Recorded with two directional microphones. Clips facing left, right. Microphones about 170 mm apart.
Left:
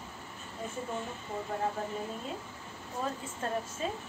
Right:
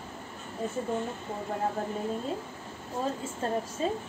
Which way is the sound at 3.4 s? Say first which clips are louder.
Right 4 dB; 30° right (ahead or behind).